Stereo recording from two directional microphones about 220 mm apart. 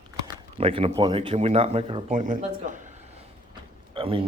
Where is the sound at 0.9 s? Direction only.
20° right (ahead or behind).